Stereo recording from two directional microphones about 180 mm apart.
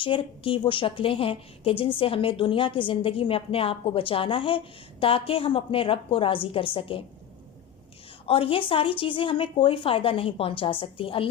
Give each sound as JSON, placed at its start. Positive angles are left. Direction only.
{"t": 0.0, "sound": "a woman's voice", "side_deg": 30}
{"t": 8.3, "sound": "a woman's voice", "side_deg": 30}